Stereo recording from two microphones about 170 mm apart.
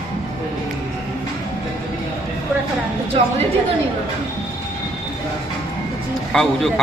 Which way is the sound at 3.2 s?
40° right (ahead or behind).